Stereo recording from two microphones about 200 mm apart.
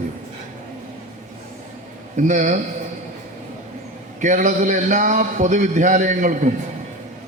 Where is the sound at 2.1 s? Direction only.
35° right (ahead or behind).